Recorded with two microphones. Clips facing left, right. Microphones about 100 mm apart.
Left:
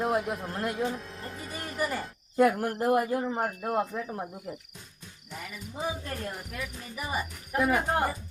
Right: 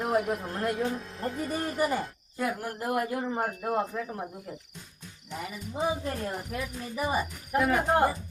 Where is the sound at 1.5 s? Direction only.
35° right (ahead or behind).